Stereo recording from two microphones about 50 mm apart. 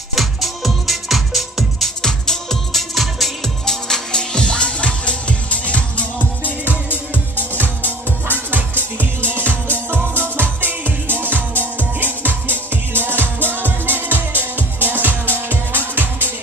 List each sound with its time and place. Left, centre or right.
0.1 s music: centre
2.0 s music: centre
2.9 s music: centre
3.6 s music: centre
6.9 s music: left
8.3 s music: right